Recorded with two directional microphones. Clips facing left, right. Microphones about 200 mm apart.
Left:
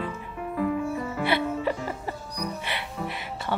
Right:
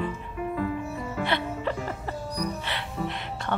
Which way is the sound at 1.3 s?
10° left (ahead or behind).